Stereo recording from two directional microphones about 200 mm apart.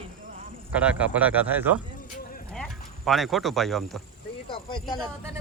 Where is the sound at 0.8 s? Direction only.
5° right (ahead or behind).